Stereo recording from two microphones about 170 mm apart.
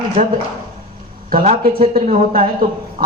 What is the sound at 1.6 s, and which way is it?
Speech, 60° right (ahead or behind).